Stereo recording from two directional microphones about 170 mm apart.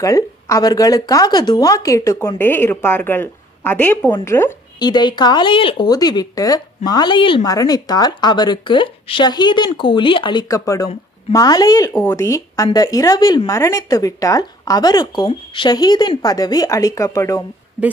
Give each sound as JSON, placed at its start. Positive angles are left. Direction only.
{"t": 0.0, "sound": "speech", "side_deg": 20}
{"t": 4.7, "sound": "speech", "side_deg": 25}